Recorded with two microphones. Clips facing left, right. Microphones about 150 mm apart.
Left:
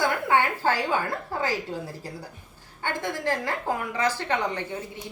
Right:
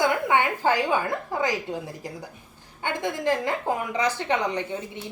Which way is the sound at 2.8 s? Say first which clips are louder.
Right 2 dB; 15° right (ahead or behind).